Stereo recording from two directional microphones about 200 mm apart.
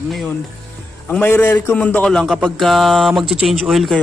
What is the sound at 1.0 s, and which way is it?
A man's voice, 10° left (ahead or behind).